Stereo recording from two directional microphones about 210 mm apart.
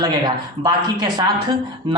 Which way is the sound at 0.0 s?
20° right (ahead or behind).